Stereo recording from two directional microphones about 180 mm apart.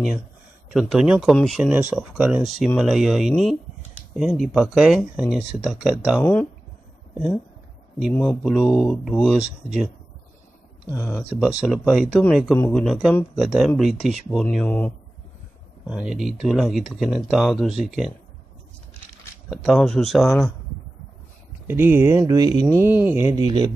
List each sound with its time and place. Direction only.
0.7 s speech: 5° right (ahead or behind)
1.7 s speech: 10° right (ahead or behind)
8.1 s speech: 5° left (ahead or behind)
11.0 s speech: 15° left (ahead or behind)
11.3 s speech: centre (ahead or behind)
15.9 s speech: 5° right (ahead or behind)
19.5 s speech: centre (ahead or behind)
21.6 s speech: 10° right (ahead or behind)